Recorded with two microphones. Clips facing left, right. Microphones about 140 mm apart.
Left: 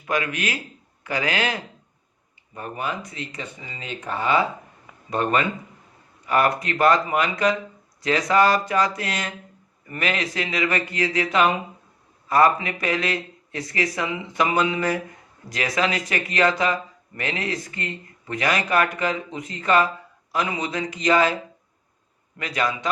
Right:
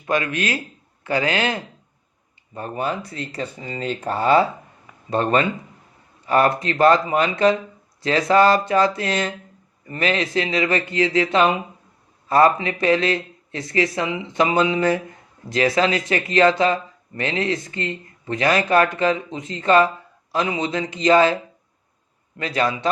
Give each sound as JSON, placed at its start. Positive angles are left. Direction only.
{"t": 0.0, "sound": "speech", "side_deg": -25}
{"t": 22.4, "sound": "speech", "side_deg": -30}